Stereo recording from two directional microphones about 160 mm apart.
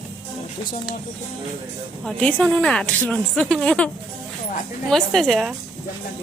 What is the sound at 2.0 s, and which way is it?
Speech, 5° left (ahead or behind).